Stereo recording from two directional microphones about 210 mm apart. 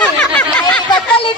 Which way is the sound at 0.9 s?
25° left (ahead or behind).